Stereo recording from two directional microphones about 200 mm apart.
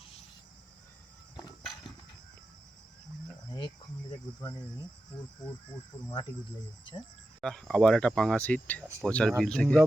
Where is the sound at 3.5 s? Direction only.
25° left (ahead or behind).